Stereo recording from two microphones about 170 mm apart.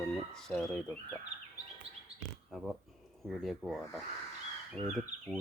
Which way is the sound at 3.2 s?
Centre (ahead or behind).